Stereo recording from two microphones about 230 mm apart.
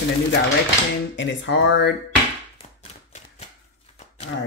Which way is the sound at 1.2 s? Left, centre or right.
Left.